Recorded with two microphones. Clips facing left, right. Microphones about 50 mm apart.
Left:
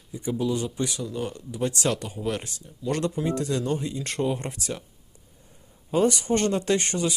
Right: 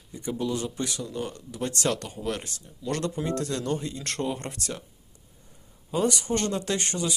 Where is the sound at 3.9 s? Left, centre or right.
Centre.